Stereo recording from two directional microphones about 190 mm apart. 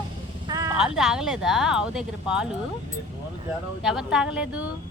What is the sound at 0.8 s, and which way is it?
Speech, 5° right (ahead or behind).